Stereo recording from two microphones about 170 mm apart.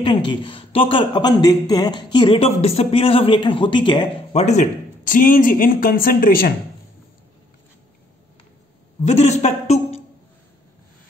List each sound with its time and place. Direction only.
0.0 s speech: 30° left (ahead or behind)
4.3 s speech: 40° left (ahead or behind); by 6.5 s 60° left (ahead or behind)
9.0 s a sound: 40° left (ahead or behind)